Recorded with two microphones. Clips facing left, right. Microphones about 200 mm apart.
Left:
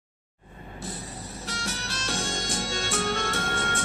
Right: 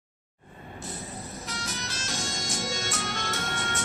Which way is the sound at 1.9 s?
60° left (ahead or behind).